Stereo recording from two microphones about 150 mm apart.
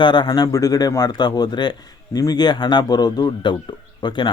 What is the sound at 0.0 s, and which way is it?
Speech, 30° left (ahead or behind).